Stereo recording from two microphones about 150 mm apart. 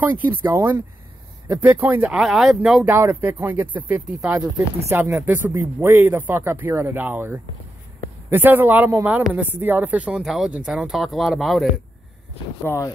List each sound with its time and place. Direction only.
0.0 s speech: 10° right (ahead or behind)
12.6 s speech: 15° left (ahead or behind)